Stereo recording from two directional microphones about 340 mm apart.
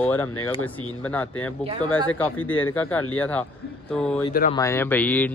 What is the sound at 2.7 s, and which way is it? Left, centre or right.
Speech, centre.